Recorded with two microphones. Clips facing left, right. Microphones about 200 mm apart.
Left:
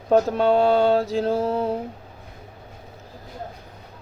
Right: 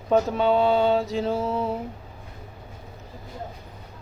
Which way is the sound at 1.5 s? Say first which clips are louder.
Left 3 dB; 35° left (ahead or behind).